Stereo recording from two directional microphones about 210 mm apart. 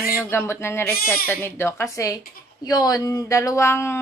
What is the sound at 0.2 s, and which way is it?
A woman's voice, 10° left (ahead or behind).